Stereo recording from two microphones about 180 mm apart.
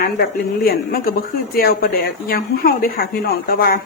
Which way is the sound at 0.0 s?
55° left (ahead or behind).